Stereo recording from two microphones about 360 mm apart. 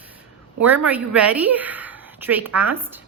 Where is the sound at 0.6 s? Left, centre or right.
Centre.